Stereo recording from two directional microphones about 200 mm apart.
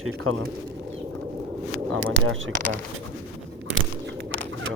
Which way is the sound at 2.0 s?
90° right.